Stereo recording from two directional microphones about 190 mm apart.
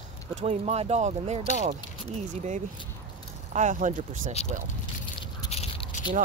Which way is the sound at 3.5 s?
40° right (ahead or behind).